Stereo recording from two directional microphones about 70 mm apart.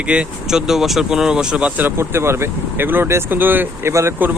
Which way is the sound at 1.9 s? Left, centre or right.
Right.